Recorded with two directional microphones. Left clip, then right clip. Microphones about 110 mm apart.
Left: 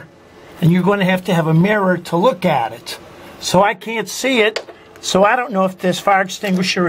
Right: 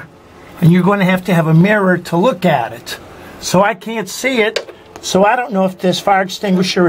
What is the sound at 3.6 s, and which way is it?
Speech, 35° left (ahead or behind).